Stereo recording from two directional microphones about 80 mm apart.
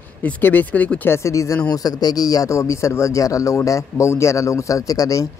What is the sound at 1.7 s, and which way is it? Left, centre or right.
A man's voice, left.